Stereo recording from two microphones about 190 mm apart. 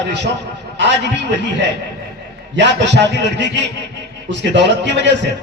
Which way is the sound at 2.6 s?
65° right (ahead or behind).